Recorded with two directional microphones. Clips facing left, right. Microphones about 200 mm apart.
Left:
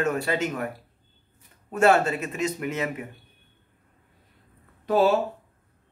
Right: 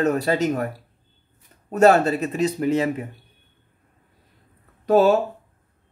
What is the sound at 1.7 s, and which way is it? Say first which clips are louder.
Speech: right 4 dB; 40° right (ahead or behind).